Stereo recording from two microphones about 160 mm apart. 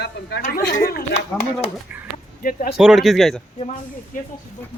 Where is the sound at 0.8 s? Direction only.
75° left (ahead or behind).